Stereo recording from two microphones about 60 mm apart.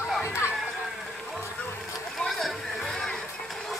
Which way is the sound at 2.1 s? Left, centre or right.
Centre.